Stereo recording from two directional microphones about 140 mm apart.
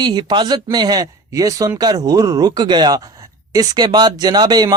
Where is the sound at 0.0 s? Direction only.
30° right (ahead or behind).